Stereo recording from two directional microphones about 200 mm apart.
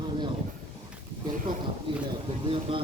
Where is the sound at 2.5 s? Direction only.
25° right (ahead or behind).